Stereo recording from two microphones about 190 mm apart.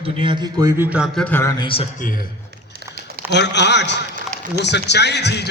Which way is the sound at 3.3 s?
65° left (ahead or behind).